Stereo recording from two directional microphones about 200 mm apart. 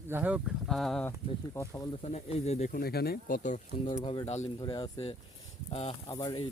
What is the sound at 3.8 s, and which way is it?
Speech, 25° left (ahead or behind).